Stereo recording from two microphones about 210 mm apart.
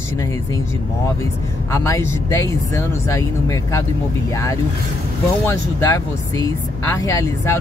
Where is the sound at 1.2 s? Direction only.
15° left (ahead or behind).